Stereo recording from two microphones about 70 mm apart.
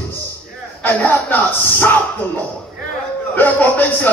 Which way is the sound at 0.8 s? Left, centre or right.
Left.